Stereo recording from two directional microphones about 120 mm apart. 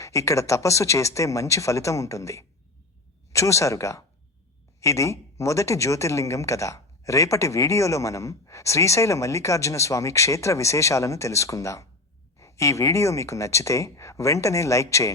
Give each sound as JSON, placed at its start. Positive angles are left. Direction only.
{"t": 0.0, "sound": "speech", "side_deg": 25}